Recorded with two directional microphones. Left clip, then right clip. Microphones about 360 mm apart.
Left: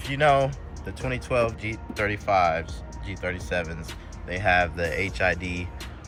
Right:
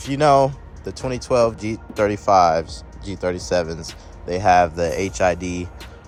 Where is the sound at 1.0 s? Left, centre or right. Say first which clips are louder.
Right 7 dB; centre.